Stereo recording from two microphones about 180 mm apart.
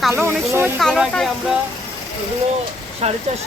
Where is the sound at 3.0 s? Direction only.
35° right (ahead or behind).